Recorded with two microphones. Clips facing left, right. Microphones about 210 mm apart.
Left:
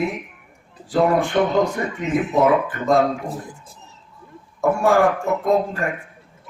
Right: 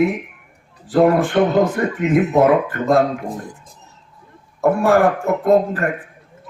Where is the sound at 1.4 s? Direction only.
50° right (ahead or behind).